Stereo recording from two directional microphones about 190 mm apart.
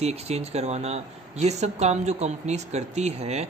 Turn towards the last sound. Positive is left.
turn(degrees=-35)  # may be behind; listen again after turning